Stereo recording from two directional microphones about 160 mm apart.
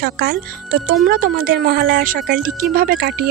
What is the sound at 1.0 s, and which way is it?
A woman's voice, 65° right (ahead or behind).